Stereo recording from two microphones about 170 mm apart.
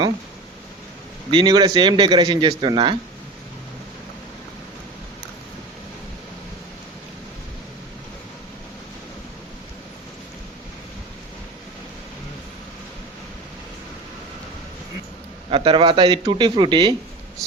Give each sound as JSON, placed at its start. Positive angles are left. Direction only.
{"t": 1.3, "sound": "a man's voice", "side_deg": -30}
{"t": 15.4, "sound": "a man's voice", "side_deg": -30}